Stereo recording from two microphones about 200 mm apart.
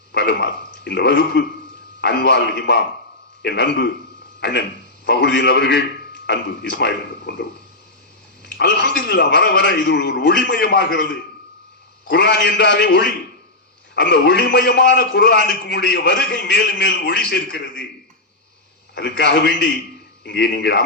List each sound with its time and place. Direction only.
0.1 s a sound: 55° left (ahead or behind)
0.9 s a man's voice: 60° left (ahead or behind)
4.4 s a sound: 55° left (ahead or behind)
5.0 s a man's voice: 55° left (ahead or behind)
8.5 s a man's voice: 55° left (ahead or behind)
12.1 s a man's voice: 55° left (ahead or behind)
18.9 s a man's voice: 55° left (ahead or behind)